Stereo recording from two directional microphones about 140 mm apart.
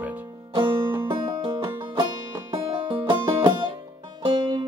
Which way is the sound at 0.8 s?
20° right (ahead or behind).